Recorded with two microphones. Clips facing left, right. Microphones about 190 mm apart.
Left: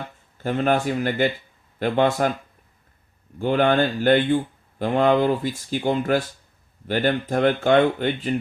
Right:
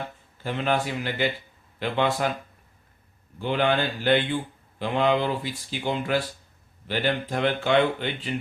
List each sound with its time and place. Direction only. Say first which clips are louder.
0.4 s speech: left 5 dB; 45° left (ahead or behind)
3.3 s speech: left 5 dB; 45° left (ahead or behind)